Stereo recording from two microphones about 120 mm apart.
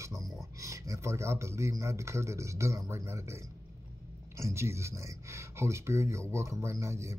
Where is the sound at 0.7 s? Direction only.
25° right (ahead or behind).